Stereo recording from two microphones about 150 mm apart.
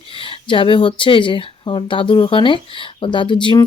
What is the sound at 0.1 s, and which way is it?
Speech, 35° left (ahead or behind).